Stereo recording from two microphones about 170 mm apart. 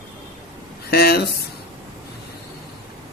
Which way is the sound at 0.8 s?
70° left (ahead or behind).